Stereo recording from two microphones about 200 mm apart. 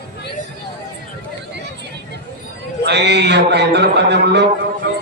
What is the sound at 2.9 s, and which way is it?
A man's voice, 60° right (ahead or behind).